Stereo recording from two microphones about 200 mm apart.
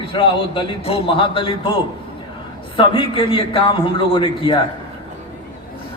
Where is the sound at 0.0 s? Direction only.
25° left (ahead or behind).